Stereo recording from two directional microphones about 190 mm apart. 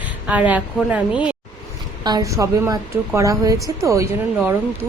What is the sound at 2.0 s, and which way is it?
Speech, 20° right (ahead or behind).